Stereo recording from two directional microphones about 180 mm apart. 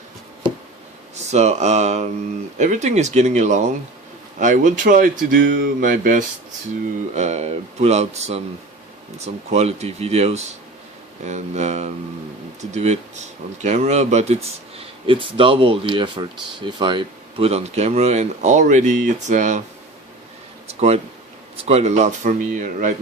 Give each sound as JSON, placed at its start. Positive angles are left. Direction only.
{"t": 1.1, "sound": "speech", "side_deg": -40}
{"t": 7.1, "sound": "speech", "side_deg": -40}
{"t": 20.7, "sound": "a sound", "side_deg": -35}
{"t": 21.5, "sound": "speech", "side_deg": -35}